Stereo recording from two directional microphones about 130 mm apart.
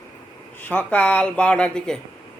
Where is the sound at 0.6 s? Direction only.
10° left (ahead or behind).